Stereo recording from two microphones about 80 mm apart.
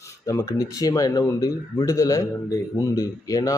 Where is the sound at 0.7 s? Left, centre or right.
Left.